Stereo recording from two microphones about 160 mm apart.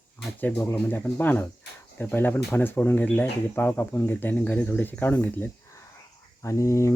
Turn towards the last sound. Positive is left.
turn(degrees=20)  # may be behind; listen again after turning